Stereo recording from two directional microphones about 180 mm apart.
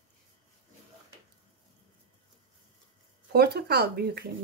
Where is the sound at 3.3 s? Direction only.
60° right (ahead or behind).